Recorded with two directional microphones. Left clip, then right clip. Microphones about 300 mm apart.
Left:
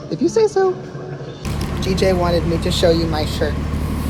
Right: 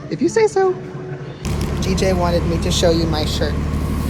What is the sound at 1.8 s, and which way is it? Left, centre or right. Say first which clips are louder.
Speech: left 2 dB; centre.